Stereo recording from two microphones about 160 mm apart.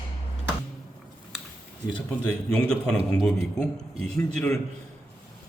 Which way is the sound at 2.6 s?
5° left (ahead or behind).